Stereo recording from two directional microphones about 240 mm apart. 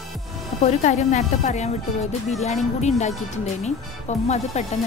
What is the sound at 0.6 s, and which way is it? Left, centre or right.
Speech, left.